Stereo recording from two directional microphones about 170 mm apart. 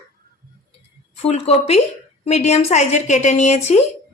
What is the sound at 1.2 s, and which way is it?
A woman's voice, 35° left (ahead or behind).